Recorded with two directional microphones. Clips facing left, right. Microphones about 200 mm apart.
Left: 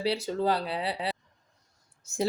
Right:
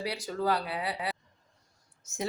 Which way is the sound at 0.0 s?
25° left (ahead or behind).